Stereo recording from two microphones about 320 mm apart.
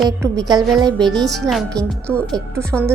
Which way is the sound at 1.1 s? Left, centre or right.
Centre.